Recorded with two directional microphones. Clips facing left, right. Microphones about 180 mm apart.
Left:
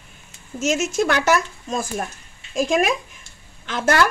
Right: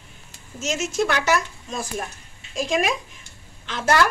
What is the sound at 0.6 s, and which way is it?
Speech, 45° left (ahead or behind).